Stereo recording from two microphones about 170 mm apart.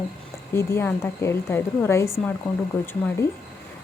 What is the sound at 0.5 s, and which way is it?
Speech, 15° left (ahead or behind).